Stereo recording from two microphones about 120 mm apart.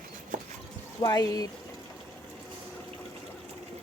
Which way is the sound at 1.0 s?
30° left (ahead or behind).